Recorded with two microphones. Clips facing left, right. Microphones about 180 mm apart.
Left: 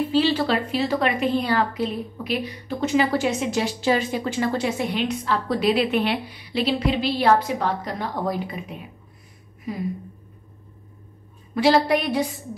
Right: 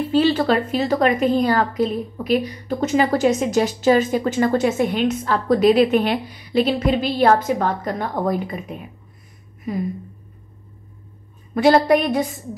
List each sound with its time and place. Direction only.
0.1 s a woman's voice: 50° right (ahead or behind)
11.5 s a woman's voice: 50° right (ahead or behind)